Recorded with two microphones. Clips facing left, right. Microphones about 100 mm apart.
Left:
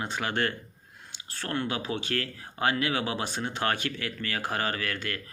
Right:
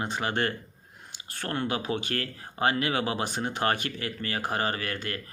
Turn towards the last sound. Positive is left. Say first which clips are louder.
# even
turn(degrees=-35)  # may be behind; listen again after turning